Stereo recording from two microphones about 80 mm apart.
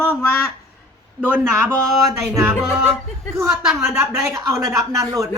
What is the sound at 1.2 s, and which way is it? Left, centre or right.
Speech, left.